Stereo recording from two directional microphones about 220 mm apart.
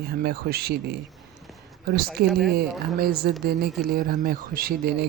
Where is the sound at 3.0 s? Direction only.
45° right (ahead or behind).